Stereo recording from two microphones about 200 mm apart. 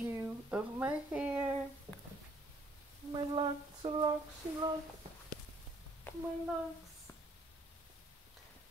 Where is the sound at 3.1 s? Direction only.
25° right (ahead or behind).